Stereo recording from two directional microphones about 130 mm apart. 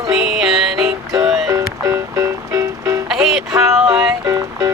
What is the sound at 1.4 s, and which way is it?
Music, 20° right (ahead or behind).